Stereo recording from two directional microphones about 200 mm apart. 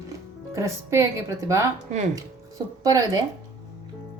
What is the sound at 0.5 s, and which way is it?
Speech, 15° right (ahead or behind).